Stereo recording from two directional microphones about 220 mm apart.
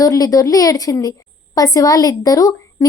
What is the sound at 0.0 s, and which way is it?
Speech, 15° left (ahead or behind).